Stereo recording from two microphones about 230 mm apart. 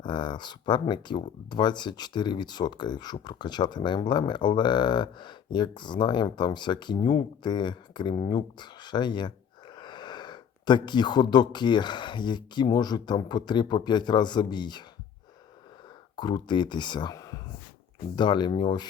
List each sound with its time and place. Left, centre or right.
0.0 s speech: centre
16.1 s speech: centre